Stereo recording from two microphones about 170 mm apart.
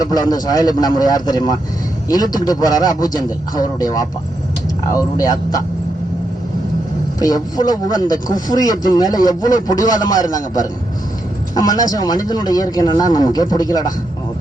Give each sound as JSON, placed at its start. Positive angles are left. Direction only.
{"t": 0.0, "sound": "a man's voice", "side_deg": 20}
{"t": 7.2, "sound": "a man's voice", "side_deg": 20}